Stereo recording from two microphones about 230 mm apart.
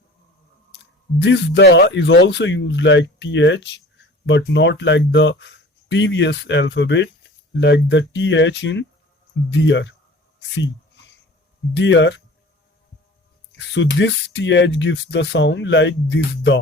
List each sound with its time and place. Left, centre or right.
0.8 s speech: left
11.7 s speech: left
13.6 s speech: left